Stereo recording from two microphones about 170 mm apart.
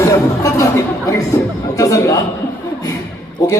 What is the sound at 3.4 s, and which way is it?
Speech, 20° left (ahead or behind).